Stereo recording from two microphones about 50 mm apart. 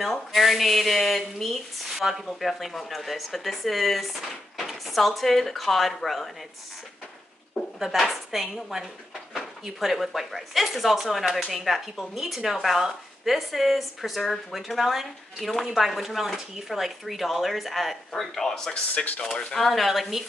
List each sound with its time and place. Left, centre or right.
0.0 s speech: centre
7.8 s speech: centre
18.7 s speech: left
19.3 s speech: centre